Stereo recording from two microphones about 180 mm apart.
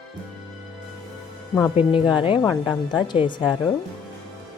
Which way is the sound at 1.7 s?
30° left (ahead or behind).